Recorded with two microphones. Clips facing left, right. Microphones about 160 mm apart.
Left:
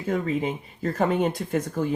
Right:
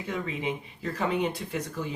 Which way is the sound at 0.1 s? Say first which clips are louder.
Left 7 dB; 45° left (ahead or behind).